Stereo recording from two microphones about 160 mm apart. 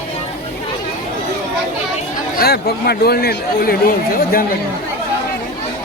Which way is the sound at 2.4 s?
85° left.